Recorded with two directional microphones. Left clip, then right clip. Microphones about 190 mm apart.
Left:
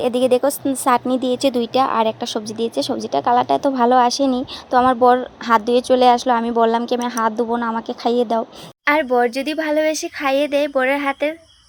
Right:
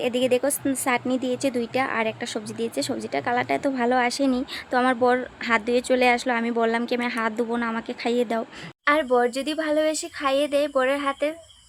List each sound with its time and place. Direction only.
0.0 s a woman's voice: 20° left (ahead or behind)